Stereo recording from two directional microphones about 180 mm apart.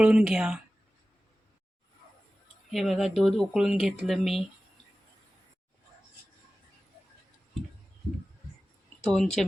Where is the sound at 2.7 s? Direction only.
Centre (ahead or behind).